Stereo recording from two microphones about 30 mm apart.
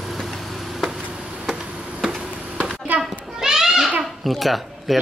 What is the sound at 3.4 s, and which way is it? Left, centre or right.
Children playing, centre.